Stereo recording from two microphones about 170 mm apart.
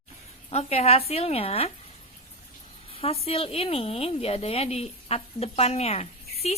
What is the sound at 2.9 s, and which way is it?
Speech, 35° left (ahead or behind).